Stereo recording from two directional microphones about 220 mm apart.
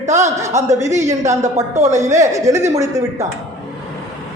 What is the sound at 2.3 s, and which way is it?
Speech, 15° right (ahead or behind).